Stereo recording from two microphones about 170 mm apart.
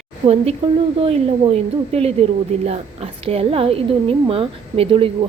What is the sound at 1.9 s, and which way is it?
A woman's voice, 35° right (ahead or behind).